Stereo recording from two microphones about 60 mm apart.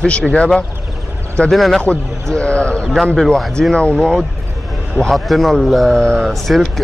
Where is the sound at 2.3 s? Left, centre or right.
Centre.